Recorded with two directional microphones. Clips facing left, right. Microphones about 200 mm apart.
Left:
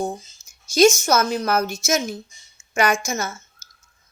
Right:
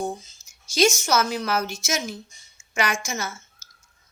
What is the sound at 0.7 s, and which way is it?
Speech, 45° left (ahead or behind).